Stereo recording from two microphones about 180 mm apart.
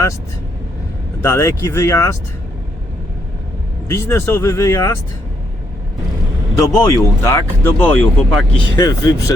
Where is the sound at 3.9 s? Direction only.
15° left (ahead or behind).